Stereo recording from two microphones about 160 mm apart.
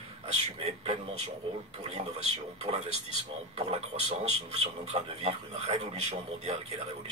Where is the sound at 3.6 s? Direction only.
40° right (ahead or behind).